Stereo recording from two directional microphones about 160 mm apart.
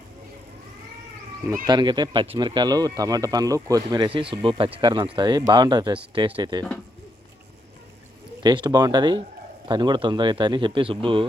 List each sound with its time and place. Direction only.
1.6 s speech: 25° right (ahead or behind)
8.4 s speech: 25° right (ahead or behind)